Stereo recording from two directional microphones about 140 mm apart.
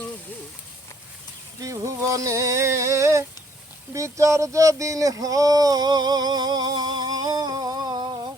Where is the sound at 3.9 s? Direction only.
20° right (ahead or behind).